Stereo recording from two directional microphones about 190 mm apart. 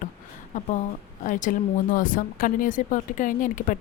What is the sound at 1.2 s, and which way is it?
A woman's voice, 45° left (ahead or behind).